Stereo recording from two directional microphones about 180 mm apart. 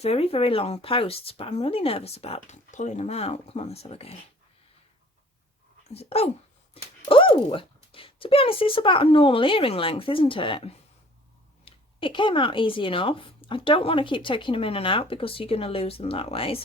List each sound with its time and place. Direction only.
0.0 s speech: 35° left (ahead or behind)
5.9 s speech: 35° left (ahead or behind)